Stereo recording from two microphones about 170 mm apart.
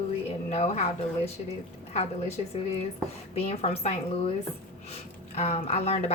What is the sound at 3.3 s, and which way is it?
Speech, 35° left (ahead or behind).